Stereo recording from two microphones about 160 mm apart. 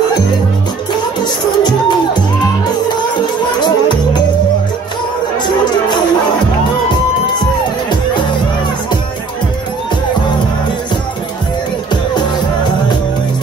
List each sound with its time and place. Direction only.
1.2 s music: 25° left (ahead or behind)
3.6 s music: 25° left (ahead or behind)
5.4 s music: 25° left (ahead or behind)
11.9 s music: 30° left (ahead or behind)